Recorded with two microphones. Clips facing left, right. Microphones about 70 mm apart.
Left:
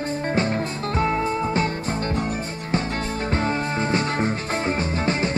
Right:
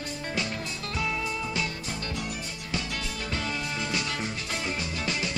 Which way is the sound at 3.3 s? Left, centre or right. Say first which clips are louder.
Left 8 dB; left.